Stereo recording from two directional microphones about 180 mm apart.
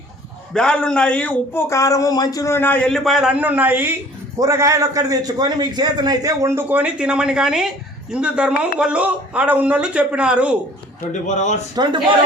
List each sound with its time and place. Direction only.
0.5 s a man's voice: 5° left (ahead or behind)
11.1 s speech: 40° left (ahead or behind)
11.7 s a man's voice: 25° right (ahead or behind)